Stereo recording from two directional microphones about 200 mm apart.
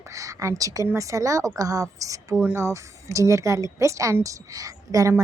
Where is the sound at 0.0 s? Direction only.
15° right (ahead or behind).